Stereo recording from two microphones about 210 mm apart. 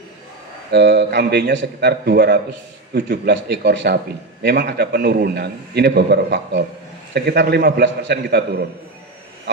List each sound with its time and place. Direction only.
0.7 s a man's voice: 55° right (ahead or behind)